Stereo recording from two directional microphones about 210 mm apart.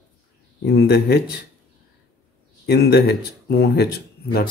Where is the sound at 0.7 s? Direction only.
50° left (ahead or behind).